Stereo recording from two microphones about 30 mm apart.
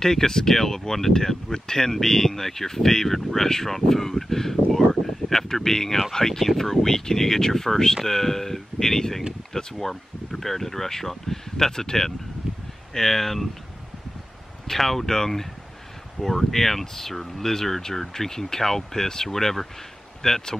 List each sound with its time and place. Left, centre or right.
0.0 s speech: centre
12.4 s a sound: centre
12.9 s speech: centre
14.7 s speech: centre